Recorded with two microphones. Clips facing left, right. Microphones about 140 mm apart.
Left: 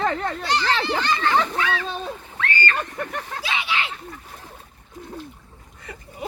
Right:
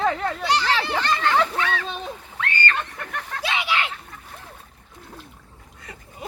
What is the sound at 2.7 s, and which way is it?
Speech, 5° left (ahead or behind).